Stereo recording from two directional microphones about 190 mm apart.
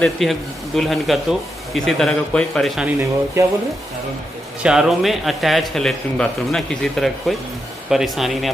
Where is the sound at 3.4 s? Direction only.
15° right (ahead or behind).